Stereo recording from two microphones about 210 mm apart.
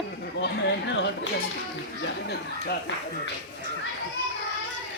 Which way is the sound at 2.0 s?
55° left (ahead or behind).